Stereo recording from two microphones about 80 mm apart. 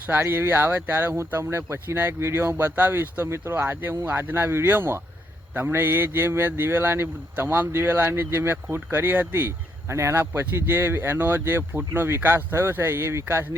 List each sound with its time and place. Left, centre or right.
0.1 s speech: right